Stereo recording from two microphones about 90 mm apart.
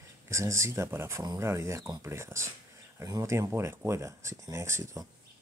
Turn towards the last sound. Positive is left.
turn(degrees=-35)  # may be behind; listen again after turning